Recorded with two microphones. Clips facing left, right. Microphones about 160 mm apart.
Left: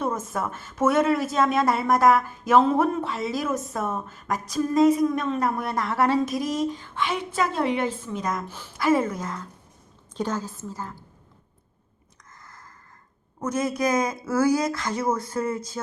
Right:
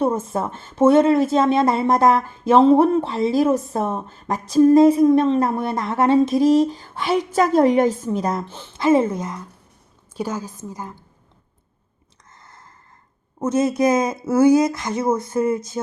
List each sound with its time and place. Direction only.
0.0 s a woman's voice: 30° right (ahead or behind)
12.4 s a sound: 25° right (ahead or behind)
13.4 s speech: 25° right (ahead or behind)